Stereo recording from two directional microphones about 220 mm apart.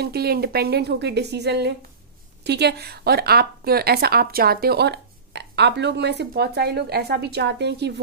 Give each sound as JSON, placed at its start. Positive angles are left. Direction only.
{"t": 0.0, "sound": "a woman's voice", "side_deg": -45}